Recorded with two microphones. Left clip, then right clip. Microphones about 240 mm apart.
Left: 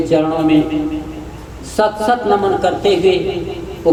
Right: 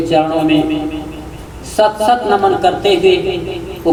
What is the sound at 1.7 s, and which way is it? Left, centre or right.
A woman's voice, right.